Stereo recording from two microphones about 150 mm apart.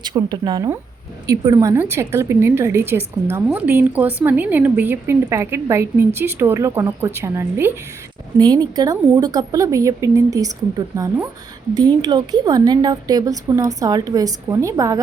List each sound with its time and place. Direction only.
0.0 s a woman's voice: 30° right (ahead or behind)
8.4 s a woman's voice: 30° right (ahead or behind)